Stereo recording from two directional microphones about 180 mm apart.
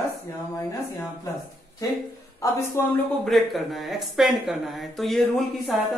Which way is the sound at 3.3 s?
Centre (ahead or behind).